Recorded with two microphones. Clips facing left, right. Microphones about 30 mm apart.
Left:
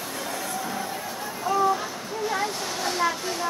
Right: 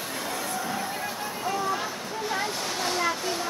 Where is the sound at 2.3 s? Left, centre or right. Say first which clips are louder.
Even; centre.